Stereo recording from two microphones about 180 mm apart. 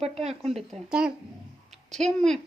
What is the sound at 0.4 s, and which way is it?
Speech, centre (ahead or behind).